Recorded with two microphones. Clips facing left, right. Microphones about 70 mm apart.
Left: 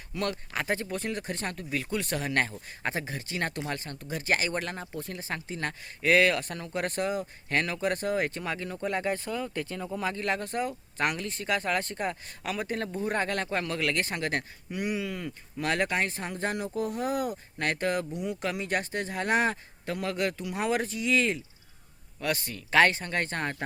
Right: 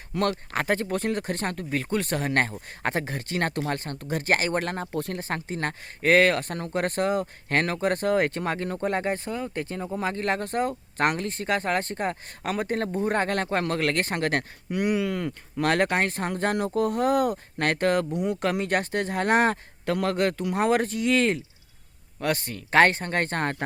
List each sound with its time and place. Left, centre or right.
0.1 s speech: right
9.0 s speech: right